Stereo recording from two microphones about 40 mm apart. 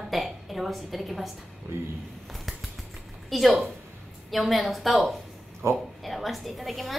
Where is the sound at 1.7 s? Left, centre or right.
Right.